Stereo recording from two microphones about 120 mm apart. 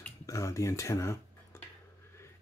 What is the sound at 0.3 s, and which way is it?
Speech, 25° left (ahead or behind).